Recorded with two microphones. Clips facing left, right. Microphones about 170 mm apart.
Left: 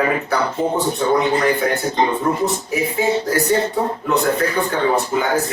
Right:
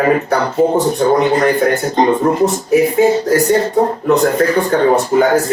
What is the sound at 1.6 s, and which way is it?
A man's voice, 50° right (ahead or behind).